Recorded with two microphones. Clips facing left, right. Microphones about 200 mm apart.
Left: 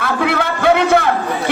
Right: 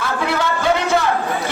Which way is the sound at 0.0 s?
60° left (ahead or behind).